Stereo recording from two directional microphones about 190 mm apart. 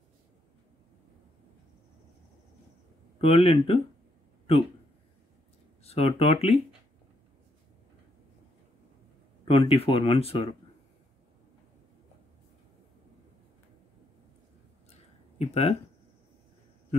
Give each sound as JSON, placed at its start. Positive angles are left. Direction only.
{"t": 3.2, "sound": "speech", "side_deg": 30}
{"t": 5.9, "sound": "speech", "side_deg": 30}
{"t": 9.4, "sound": "speech", "side_deg": 30}
{"t": 14.9, "sound": "a sound", "side_deg": 35}